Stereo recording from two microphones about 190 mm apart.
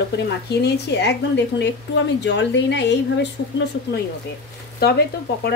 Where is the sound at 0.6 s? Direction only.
60° left (ahead or behind).